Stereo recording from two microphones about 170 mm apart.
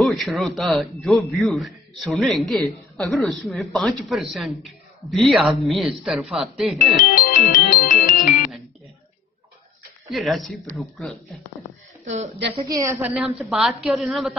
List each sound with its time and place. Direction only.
0.0 s a man's voice: centre (ahead or behind)
6.8 s music: 55° left (ahead or behind)
10.0 s a man's voice: centre (ahead or behind)
12.5 s a woman's voice: 20° right (ahead or behind)
13.0 s a man's voice: 5° right (ahead or behind)